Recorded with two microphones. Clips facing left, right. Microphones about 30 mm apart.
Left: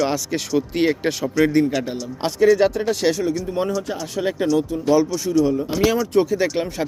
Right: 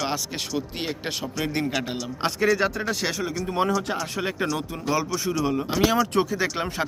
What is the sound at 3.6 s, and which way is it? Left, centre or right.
Speech, right.